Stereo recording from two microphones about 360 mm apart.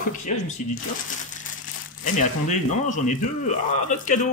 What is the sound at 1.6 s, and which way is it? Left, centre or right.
Speech, left.